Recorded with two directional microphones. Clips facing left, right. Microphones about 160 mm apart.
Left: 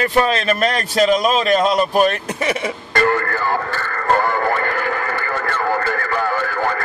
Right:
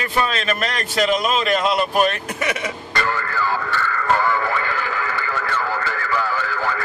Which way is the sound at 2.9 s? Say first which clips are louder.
Left 7 dB; 50° left (ahead or behind).